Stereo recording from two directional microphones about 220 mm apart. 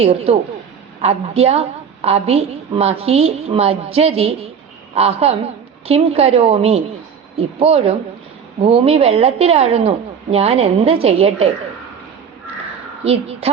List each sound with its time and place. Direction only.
0.0 s a woman's voice: 25° right (ahead or behind)
13.1 s a woman's voice: 25° right (ahead or behind)